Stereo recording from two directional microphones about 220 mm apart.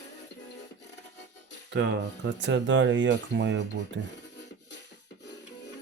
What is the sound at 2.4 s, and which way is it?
Speech, 60° right (ahead or behind).